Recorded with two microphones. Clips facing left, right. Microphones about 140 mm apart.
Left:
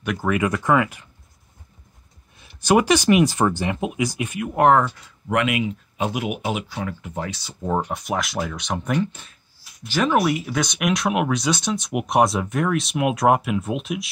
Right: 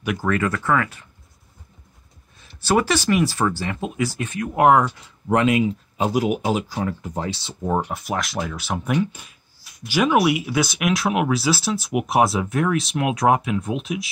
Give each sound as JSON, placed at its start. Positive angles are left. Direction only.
{"t": 0.0, "sound": "speech", "side_deg": -5}
{"t": 0.3, "sound": "speech", "side_deg": 15}
{"t": 2.3, "sound": "speech", "side_deg": 15}
{"t": 4.6, "sound": "speech", "side_deg": -10}
{"t": 5.3, "sound": "speech", "side_deg": -35}
{"t": 7.6, "sound": "speech", "side_deg": -5}